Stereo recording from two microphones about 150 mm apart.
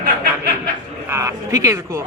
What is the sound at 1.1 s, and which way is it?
Speech, 20° right (ahead or behind).